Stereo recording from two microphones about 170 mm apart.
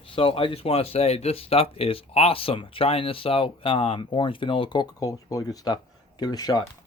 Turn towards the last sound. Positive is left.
turn(degrees=25)  # may be behind; listen again after turning